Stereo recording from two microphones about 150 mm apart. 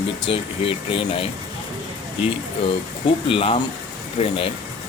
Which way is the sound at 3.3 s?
35° left (ahead or behind).